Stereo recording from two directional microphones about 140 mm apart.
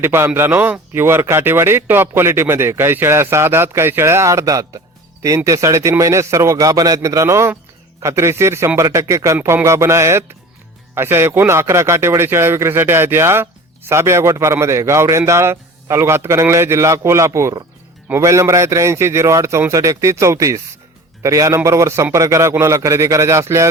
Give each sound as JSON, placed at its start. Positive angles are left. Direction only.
{"t": 0.0, "sound": "a man's voice", "side_deg": -15}